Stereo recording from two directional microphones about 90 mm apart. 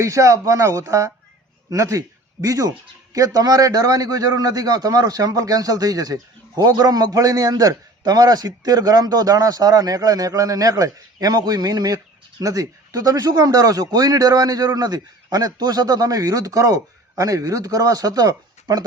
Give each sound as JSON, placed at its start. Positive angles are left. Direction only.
{"t": 0.0, "sound": "speech", "side_deg": -35}